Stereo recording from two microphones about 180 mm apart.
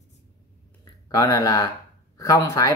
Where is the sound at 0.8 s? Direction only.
20° left (ahead or behind).